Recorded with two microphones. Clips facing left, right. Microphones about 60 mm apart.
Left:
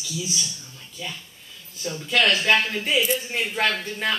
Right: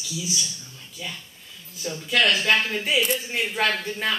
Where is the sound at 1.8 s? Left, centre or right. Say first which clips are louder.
Left 1 dB; centre.